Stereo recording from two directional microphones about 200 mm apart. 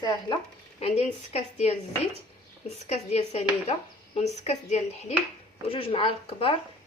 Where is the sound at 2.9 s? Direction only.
30° left (ahead or behind).